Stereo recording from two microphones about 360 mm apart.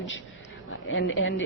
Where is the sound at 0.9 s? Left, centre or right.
Left.